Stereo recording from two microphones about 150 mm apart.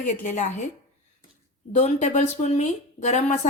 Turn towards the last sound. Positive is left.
turn(degrees=50)  # may be behind; listen again after turning